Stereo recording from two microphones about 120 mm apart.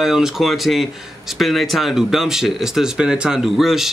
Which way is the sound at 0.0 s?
5° right (ahead or behind).